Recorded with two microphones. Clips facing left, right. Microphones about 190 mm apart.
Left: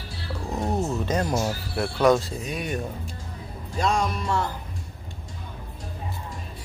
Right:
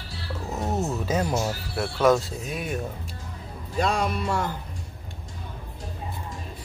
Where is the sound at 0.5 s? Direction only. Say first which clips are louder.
Left 1 dB; 5° right (ahead or behind).